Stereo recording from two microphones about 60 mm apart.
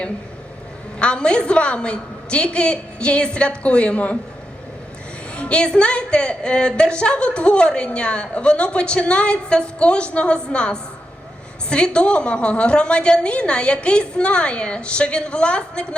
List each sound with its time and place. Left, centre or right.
0.9 s a woman's voice: centre
5.3 s a woman's voice: centre